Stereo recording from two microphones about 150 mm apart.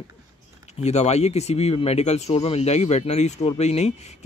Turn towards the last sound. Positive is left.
turn(degrees=45)  # may be behind; listen again after turning